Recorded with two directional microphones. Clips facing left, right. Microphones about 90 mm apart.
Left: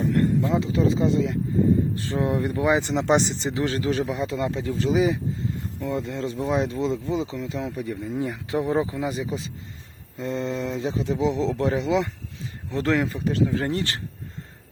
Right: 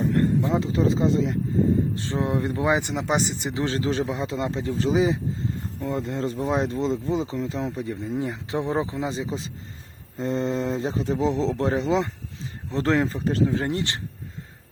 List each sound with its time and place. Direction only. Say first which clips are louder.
0.1 s a sound: even; 20° right (ahead or behind)
0.6 s speech: even; 35° right (ahead or behind)
2.9 s speech: left 4 dB; 5° right (ahead or behind)
3.4 s speech: left 1 dB; 25° right (ahead or behind)